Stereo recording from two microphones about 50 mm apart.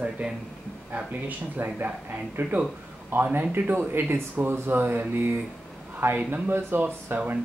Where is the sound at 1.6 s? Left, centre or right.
Right.